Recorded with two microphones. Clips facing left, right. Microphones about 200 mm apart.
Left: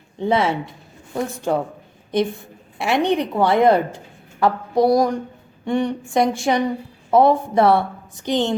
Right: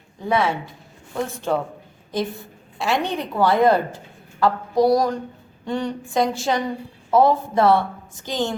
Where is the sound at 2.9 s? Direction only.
20° left (ahead or behind).